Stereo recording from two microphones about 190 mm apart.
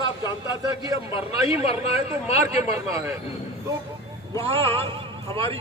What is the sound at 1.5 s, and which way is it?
Speech, 30° left (ahead or behind).